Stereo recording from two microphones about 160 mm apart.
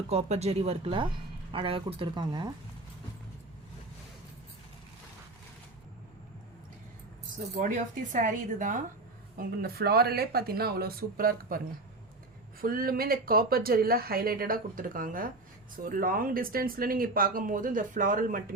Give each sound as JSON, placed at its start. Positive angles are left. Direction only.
{"t": 0.1, "sound": "speech", "side_deg": -40}
{"t": 7.5, "sound": "speech", "side_deg": -55}
{"t": 9.4, "sound": "speech", "side_deg": -70}
{"t": 12.6, "sound": "speech", "side_deg": -65}